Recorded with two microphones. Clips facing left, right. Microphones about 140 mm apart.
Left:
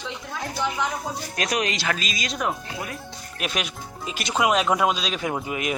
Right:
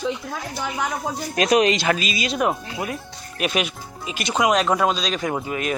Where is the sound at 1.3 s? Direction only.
25° right (ahead or behind).